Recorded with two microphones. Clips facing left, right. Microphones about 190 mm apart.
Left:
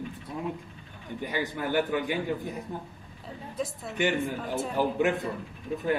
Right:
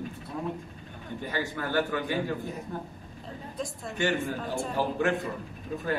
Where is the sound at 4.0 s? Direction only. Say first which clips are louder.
Left 1 dB; 15° left (ahead or behind).